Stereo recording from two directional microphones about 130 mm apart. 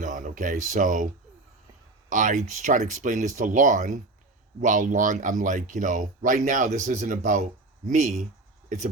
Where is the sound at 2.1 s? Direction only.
75° right (ahead or behind).